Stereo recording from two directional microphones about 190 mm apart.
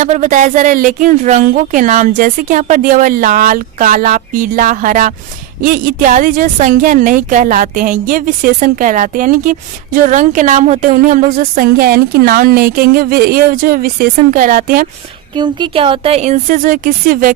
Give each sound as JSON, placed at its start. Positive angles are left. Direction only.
{"t": 0.0, "sound": "a woman's voice", "side_deg": -40}
{"t": 15.4, "sound": "speech", "side_deg": -25}